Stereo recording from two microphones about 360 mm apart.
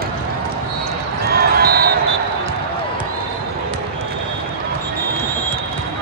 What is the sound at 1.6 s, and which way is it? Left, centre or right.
Basketball bounce, right.